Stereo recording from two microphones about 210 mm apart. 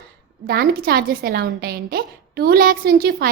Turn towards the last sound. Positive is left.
turn(degrees=-45)  # may be behind; listen again after turning